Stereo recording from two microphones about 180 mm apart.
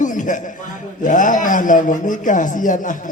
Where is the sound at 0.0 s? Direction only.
45° left (ahead or behind).